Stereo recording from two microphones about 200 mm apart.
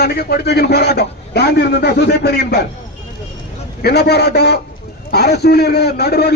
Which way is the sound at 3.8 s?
55° left (ahead or behind).